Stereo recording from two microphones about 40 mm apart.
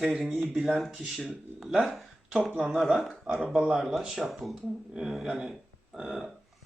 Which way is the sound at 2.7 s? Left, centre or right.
Centre.